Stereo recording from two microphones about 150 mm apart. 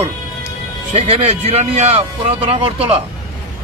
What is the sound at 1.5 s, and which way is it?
Speech, 50° right (ahead or behind).